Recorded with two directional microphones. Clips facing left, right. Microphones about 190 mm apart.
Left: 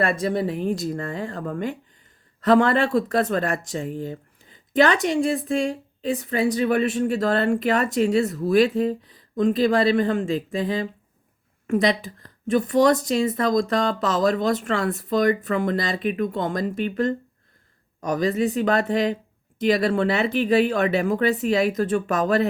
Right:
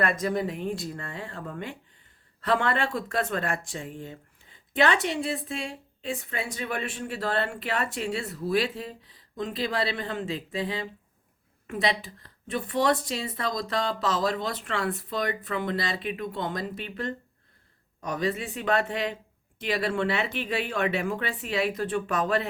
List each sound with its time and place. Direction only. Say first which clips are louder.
0.0 s a woman's voice: left 4 dB; 30° left (ahead or behind)